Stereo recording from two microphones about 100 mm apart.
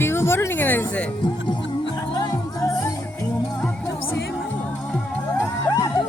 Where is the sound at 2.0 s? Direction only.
40° left (ahead or behind).